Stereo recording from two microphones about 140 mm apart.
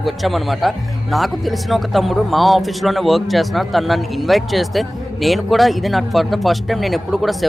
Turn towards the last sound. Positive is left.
turn(degrees=0)  # may be behind; listen again after turning